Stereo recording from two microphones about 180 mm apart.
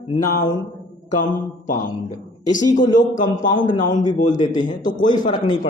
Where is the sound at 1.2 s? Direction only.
45° left (ahead or behind).